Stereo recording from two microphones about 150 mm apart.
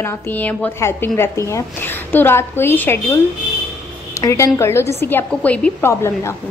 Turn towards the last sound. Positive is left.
turn(degrees=15)  # may be behind; listen again after turning